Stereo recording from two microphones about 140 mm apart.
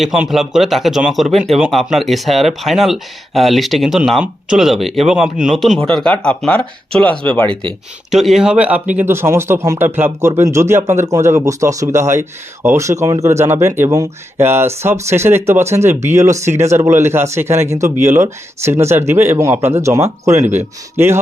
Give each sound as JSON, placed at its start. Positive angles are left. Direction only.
{"t": 0.0, "sound": "speech", "side_deg": 0}
{"t": 7.4, "sound": "speech", "side_deg": -35}
{"t": 8.1, "sound": "speech", "side_deg": 0}